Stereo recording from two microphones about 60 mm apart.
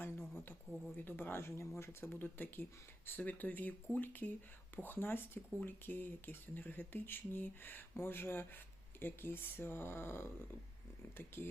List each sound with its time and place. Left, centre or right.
0.0 s a sound: left
0.9 s speech: left
2.0 s speech: left